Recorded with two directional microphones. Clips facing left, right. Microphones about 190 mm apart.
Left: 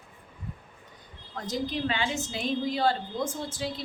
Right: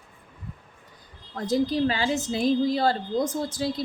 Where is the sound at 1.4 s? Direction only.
35° right (ahead or behind).